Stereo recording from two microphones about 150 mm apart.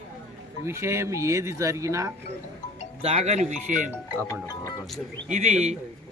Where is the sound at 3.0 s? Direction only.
45° right (ahead or behind).